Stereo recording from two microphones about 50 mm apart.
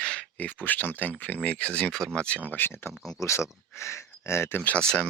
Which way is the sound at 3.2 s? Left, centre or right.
Left.